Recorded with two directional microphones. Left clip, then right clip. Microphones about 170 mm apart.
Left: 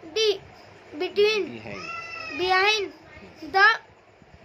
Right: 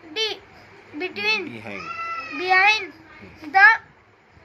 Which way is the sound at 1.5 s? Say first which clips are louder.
Right 3 dB; 20° right (ahead or behind).